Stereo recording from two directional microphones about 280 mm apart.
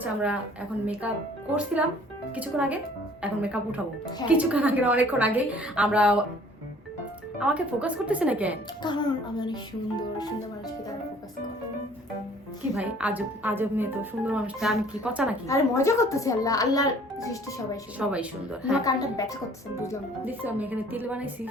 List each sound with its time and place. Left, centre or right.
0.0 s speech: centre
1.5 s speech: centre
7.3 s speech: centre
8.8 s a child's voice: centre
12.7 s speech: centre
15.4 s a child's voice: centre
18.1 s speech: centre
18.9 s a child's voice: centre
20.2 s a woman's voice: centre